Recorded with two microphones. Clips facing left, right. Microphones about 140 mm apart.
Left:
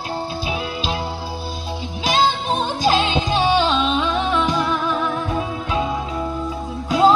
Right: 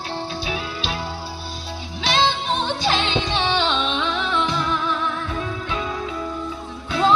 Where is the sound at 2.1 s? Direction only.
40° left (ahead or behind).